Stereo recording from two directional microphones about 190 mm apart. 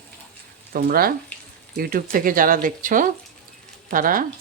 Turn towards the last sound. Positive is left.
turn(degrees=-45)  # may be behind; listen again after turning